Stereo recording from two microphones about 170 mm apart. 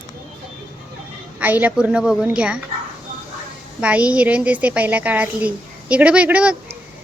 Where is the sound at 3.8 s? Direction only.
5° right (ahead or behind).